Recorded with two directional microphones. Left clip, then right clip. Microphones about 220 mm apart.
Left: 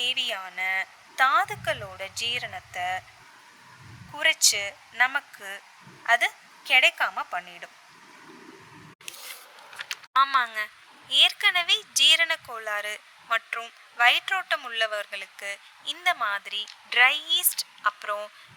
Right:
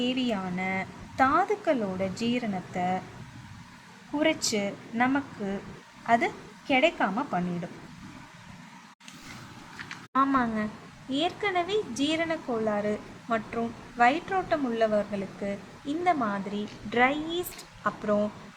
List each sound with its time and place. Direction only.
0.0 s a woman's voice: 20° left (ahead or behind)
4.2 s a woman's voice: 25° left (ahead or behind)
10.2 s a woman's voice: 30° left (ahead or behind)